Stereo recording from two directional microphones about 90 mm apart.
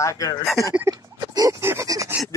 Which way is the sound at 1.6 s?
25° right (ahead or behind).